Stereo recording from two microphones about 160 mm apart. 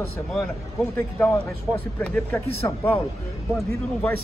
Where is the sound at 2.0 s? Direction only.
10° left (ahead or behind).